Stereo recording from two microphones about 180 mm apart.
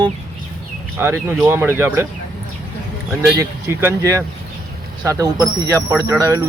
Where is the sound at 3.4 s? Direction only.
15° right (ahead or behind).